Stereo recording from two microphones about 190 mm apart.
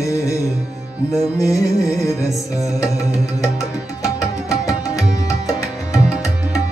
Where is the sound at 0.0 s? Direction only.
15° left (ahead or behind).